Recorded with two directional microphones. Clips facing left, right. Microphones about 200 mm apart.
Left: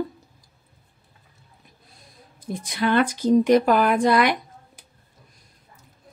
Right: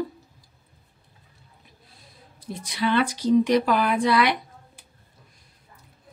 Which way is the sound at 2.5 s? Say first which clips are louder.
Left 2 dB; 50° left (ahead or behind).